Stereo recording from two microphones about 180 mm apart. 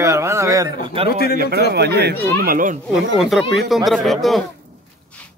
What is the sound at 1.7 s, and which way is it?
Speech, 65° right (ahead or behind).